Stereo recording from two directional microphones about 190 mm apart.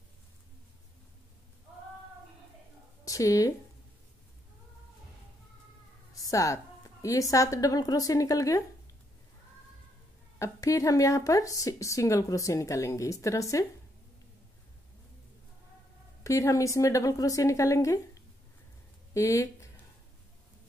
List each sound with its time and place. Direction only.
3.1 s a woman's voice: 15° left (ahead or behind)
6.1 s a woman's voice: 20° left (ahead or behind)
10.4 s a woman's voice: 15° left (ahead or behind)
16.3 s a woman's voice: 15° left (ahead or behind)